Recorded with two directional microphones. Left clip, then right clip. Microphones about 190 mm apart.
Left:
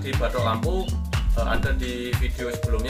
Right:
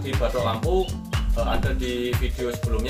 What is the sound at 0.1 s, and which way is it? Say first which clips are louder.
Speech: even; centre (ahead or behind).